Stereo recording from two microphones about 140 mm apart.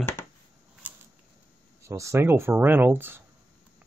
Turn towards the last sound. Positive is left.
turn(degrees=-15)  # may be behind; listen again after turning